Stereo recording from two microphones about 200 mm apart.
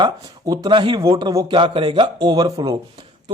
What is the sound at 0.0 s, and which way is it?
Speech, 20° right (ahead or behind).